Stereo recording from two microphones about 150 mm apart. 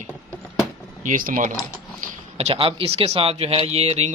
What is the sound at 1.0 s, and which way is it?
Speech, 65° right (ahead or behind).